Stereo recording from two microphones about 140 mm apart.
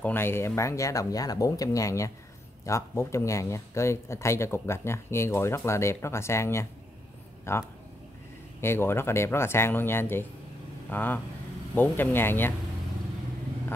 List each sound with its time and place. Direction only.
0.0 s speech: 15° left (ahead or behind)